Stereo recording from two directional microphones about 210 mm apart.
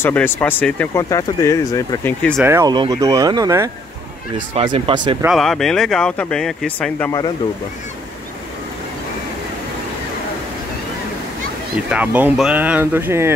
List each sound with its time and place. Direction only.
0.0 s speech: 10° left (ahead or behind)
2.4 s speech: 15° right (ahead or behind)
4.6 s speech: 25° right (ahead or behind)
5.2 s speech: centre (ahead or behind)
11.9 s speech: 5° right (ahead or behind)